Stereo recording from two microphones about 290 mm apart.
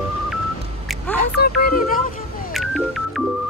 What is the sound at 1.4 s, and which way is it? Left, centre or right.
Speech, left.